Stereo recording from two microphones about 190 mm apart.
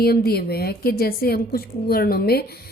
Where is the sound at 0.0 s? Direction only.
55° left (ahead or behind).